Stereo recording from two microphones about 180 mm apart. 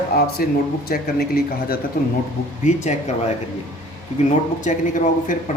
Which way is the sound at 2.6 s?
40° left (ahead or behind).